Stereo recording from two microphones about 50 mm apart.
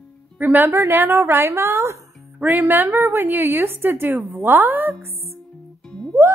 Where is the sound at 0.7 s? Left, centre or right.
Right.